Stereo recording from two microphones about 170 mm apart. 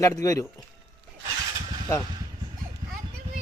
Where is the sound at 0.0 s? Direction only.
20° left (ahead or behind).